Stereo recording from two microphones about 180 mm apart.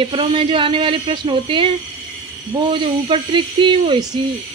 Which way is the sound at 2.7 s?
30° right (ahead or behind).